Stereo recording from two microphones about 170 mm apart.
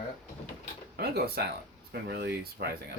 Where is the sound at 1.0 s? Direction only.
70° right (ahead or behind).